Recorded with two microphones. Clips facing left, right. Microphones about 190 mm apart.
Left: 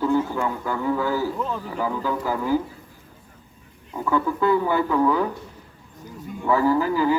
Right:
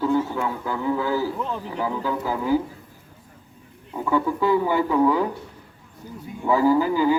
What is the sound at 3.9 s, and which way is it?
A man's voice, 15° right (ahead or behind).